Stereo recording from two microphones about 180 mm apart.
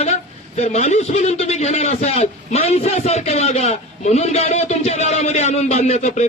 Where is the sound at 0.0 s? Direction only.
40° left (ahead or behind).